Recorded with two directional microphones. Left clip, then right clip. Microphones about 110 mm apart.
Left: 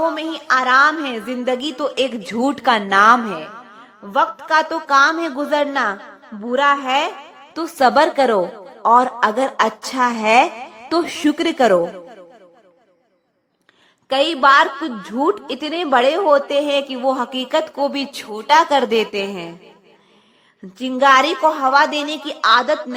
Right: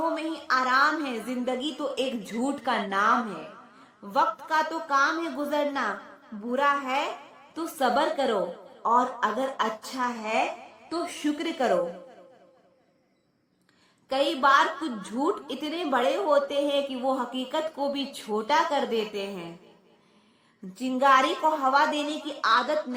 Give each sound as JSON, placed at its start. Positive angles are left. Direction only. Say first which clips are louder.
{"t": 0.0, "sound": "a woman's voice", "louder": "left 9 dB", "side_deg": 25}
{"t": 4.1, "sound": "a woman's voice", "louder": "left 9 dB", "side_deg": 25}
{"t": 4.9, "sound": "a woman's voice", "louder": "left 10 dB", "side_deg": 40}
{"t": 10.8, "sound": "a woman's voice", "louder": "left 12 dB", "side_deg": 30}
{"t": 11.3, "sound": "a woman's voice", "louder": "left 11 dB", "side_deg": 50}
{"t": 14.1, "sound": "a woman's voice", "louder": "left 9 dB", "side_deg": 25}
{"t": 20.7, "sound": "a woman's voice", "louder": "left 8 dB", "side_deg": 25}